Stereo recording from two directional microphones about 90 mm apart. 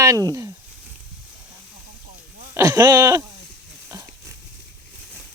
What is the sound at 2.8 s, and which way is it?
Speech, 40° right (ahead or behind).